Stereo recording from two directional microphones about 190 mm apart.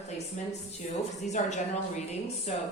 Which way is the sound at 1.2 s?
40° left (ahead or behind).